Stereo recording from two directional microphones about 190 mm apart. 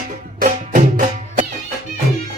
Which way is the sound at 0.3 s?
45° right (ahead or behind).